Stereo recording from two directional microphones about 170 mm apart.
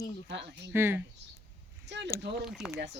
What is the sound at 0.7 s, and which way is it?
Speech, 15° right (ahead or behind).